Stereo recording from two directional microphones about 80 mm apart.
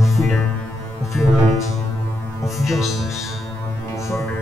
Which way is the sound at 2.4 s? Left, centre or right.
Centre.